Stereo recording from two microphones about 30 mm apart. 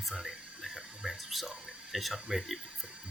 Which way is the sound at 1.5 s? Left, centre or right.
Right.